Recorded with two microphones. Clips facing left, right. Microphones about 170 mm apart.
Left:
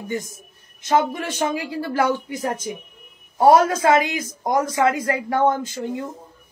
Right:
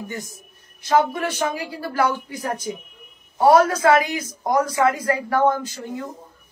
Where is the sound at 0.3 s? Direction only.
20° left (ahead or behind).